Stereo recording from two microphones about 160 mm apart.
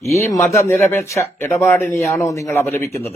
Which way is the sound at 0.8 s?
20° left (ahead or behind).